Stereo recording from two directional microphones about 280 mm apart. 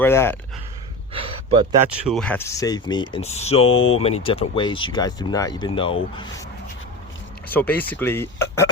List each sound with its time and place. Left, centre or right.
0.0 s speech: centre
1.1 s gasp: centre
1.8 s speech: centre
7.4 s speech: centre